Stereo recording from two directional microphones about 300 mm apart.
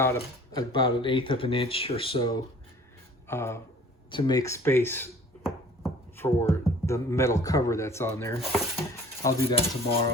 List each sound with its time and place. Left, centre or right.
0.0 s speech: centre